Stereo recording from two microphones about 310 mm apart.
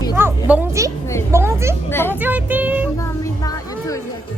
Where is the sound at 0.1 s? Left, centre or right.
Centre.